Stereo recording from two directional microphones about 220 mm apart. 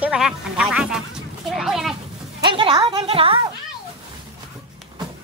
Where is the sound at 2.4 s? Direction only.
20° right (ahead or behind).